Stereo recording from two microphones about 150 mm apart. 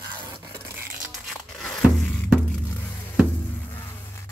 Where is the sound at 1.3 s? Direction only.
5° left (ahead or behind).